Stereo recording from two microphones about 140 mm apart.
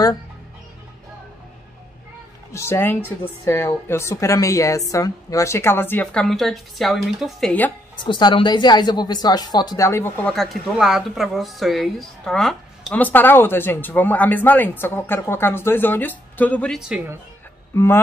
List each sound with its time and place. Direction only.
2.5 s a woman's voice: 20° left (ahead or behind)
6.2 s speech: centre (ahead or behind)
8.0 s a woman's voice: 35° left (ahead or behind); by 10.3 s 15° left (ahead or behind)
10.3 s speech: centre (ahead or behind)
13.0 s a woman's voice: 15° left (ahead or behind)
17.7 s a woman's voice: 15° left (ahead or behind)